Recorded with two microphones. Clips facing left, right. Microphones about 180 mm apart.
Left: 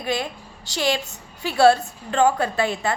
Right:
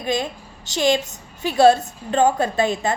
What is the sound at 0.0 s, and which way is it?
A woman's voice, 20° right (ahead or behind).